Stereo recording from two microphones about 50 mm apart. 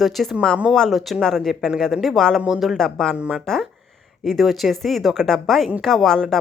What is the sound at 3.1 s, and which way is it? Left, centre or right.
Speech, right.